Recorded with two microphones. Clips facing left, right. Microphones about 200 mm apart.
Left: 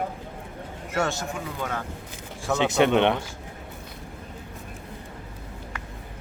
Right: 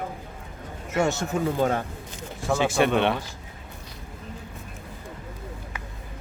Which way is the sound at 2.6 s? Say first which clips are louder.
Left 2 dB; 20° left (ahead or behind).